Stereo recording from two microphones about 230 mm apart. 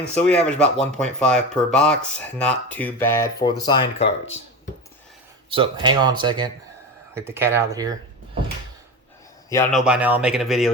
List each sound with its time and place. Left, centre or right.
0.1 s speech: centre; by 4.4 s left
5.5 s speech: right
9.7 s speech: centre